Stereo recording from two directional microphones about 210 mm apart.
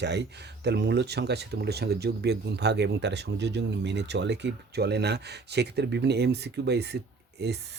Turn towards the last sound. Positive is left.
turn(degrees=-50)  # may be behind; listen again after turning